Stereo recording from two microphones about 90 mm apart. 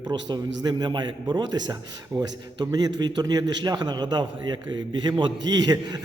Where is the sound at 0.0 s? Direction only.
50° right (ahead or behind).